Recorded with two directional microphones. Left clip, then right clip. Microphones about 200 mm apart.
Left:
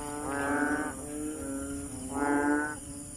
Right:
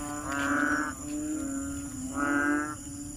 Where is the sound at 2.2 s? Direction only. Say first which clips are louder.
Even; 30° left (ahead or behind).